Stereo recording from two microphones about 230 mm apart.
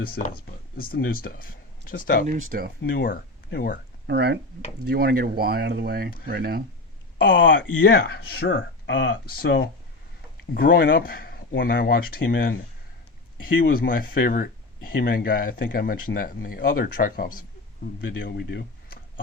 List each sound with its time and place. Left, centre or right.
0.0 s speech: left
2.2 s speech: right
2.8 s speech: left
4.0 s speech: right
7.2 s speech: left
13.6 s speech: left
18.2 s a sound: left